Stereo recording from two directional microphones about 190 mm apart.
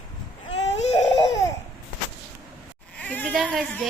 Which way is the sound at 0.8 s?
35° left (ahead or behind).